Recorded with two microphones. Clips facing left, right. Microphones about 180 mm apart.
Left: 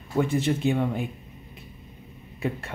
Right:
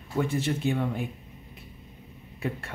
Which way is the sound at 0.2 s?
20° left (ahead or behind).